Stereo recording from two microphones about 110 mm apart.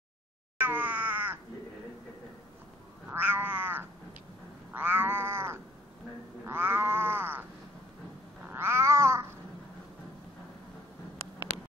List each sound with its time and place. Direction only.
0.6 s cat: 15° right (ahead or behind)
3.1 s cat: 15° right (ahead or behind)
8.5 s cat: 20° right (ahead or behind)